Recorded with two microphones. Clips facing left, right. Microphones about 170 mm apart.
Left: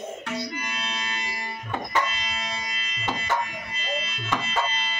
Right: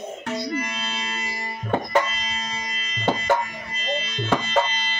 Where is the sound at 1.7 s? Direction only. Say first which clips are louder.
Right 6 dB; 45° right (ahead or behind).